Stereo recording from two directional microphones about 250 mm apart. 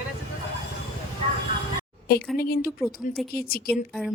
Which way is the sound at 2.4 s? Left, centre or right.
Left.